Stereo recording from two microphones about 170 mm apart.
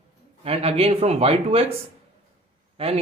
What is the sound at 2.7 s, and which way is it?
Speech, 35° right (ahead or behind).